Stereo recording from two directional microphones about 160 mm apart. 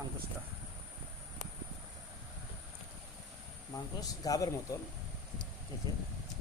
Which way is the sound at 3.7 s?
20° left (ahead or behind).